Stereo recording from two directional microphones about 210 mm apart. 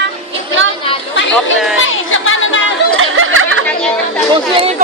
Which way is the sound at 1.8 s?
70° left (ahead or behind).